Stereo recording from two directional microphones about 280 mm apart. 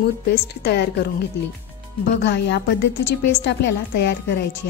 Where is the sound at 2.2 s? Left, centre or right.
Left.